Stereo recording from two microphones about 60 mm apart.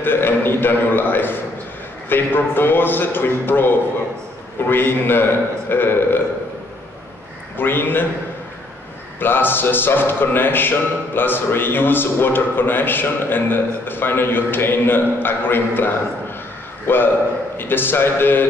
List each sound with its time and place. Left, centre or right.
0.0 s a sound: left
2.0 s speech: left
7.5 s speech: left
9.2 s a man's voice: left